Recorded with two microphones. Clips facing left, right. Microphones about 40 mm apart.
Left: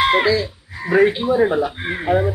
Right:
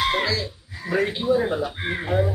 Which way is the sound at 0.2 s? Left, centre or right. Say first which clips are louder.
Left 7 dB; centre.